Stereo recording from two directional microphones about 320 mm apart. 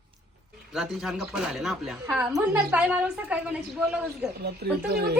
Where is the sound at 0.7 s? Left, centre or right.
Centre.